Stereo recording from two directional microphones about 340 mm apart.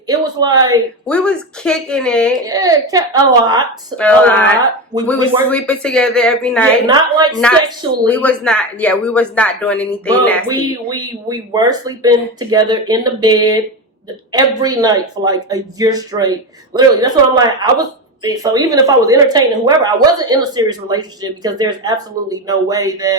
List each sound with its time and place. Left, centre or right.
0.1 s speech: centre
1.0 s speech: centre
2.4 s speech: centre
3.9 s speech: centre
4.9 s speech: centre
5.5 s speech: centre
6.8 s speech: centre
7.3 s speech: centre
10.5 s speech: centre